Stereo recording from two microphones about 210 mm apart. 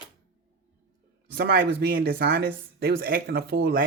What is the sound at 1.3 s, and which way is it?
Speech, 50° right (ahead or behind).